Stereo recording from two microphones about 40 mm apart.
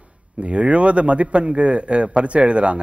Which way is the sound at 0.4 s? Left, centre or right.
Right.